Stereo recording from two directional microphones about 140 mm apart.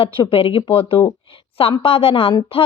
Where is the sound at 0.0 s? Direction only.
40° left (ahead or behind).